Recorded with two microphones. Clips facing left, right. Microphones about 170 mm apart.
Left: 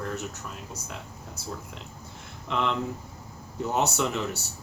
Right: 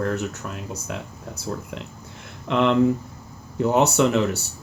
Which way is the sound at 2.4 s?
70° right (ahead or behind).